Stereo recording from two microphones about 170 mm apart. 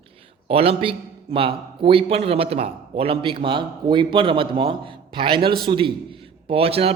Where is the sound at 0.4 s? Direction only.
35° right (ahead or behind).